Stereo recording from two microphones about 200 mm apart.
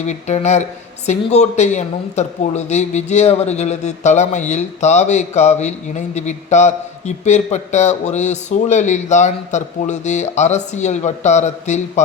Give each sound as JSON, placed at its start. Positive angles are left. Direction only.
{"t": 0.0, "sound": "speech", "side_deg": 35}